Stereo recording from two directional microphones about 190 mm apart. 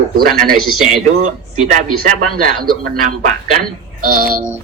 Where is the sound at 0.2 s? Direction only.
50° right (ahead or behind).